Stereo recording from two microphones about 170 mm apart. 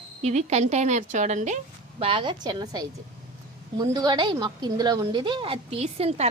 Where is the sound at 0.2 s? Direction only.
40° right (ahead or behind).